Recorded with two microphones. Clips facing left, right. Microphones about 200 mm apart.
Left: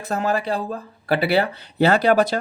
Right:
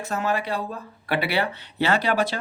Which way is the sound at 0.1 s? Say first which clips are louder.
Left 4 dB; 35° left (ahead or behind).